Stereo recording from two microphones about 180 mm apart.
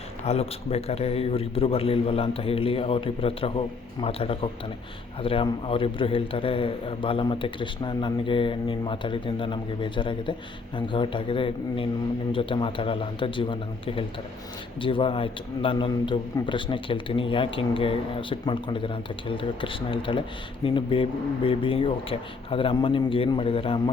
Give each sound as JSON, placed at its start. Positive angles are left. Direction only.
{"t": 0.3, "sound": "a man's voice", "side_deg": 35}